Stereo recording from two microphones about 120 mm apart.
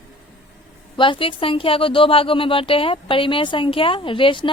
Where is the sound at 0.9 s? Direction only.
45° left (ahead or behind).